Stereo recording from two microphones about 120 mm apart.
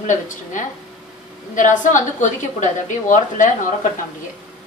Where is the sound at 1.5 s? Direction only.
90° left.